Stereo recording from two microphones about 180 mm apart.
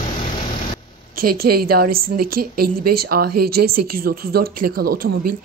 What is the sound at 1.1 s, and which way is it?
Speech, 55° right (ahead or behind).